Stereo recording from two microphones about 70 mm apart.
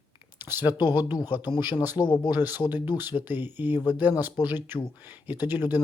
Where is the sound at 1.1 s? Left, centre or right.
Left.